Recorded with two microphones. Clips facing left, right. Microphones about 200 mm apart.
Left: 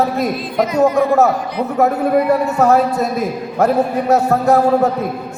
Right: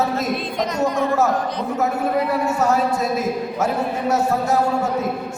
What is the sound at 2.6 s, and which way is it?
A man's voice, 60° left (ahead or behind).